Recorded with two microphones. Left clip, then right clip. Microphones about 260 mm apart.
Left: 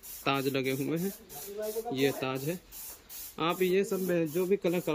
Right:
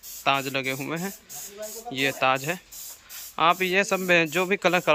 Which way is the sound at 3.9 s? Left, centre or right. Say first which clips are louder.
Right 9 dB; right.